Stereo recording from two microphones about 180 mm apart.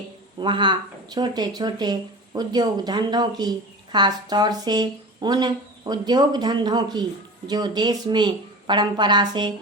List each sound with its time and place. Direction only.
0.3 s speech: 25° right (ahead or behind)